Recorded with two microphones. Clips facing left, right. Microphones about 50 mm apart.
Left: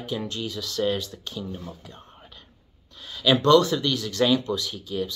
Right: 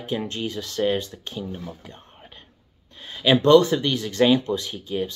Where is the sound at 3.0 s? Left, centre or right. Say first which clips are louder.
Right 2 dB; right.